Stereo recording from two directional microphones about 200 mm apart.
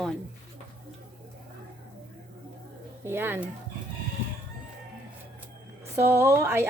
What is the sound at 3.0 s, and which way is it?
Speech, 10° right (ahead or behind).